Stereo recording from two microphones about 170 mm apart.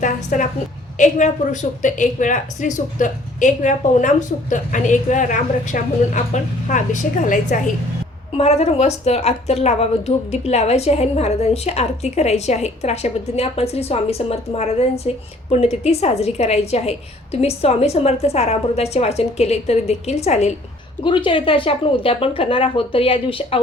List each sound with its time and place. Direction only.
0.0 s a woman's voice: 50° left (ahead or behind)
8.3 s a woman's voice: 35° left (ahead or behind)
21.0 s a woman's voice: 30° left (ahead or behind)